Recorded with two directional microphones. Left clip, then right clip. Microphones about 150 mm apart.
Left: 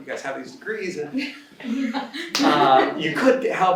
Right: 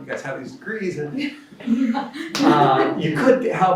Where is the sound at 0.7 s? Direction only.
40° left (ahead or behind).